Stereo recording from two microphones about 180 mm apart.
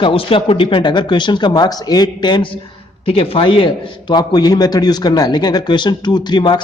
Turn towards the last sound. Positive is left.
turn(degrees=25)  # may be behind; listen again after turning